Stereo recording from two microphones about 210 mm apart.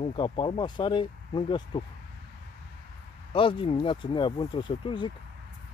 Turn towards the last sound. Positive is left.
turn(degrees=20)  # may be behind; listen again after turning